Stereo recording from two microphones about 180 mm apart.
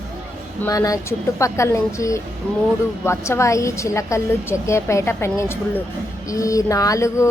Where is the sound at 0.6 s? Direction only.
20° left (ahead or behind).